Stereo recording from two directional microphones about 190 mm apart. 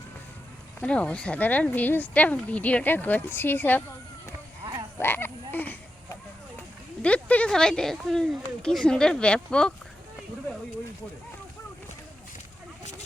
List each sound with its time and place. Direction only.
0.8 s speech: 5° left (ahead or behind)
4.6 s frog: 15° right (ahead or behind)
4.9 s frog: 10° left (ahead or behind)
7.0 s speech: 5° left (ahead or behind)